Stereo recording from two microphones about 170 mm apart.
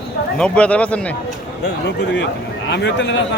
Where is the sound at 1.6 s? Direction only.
85° left.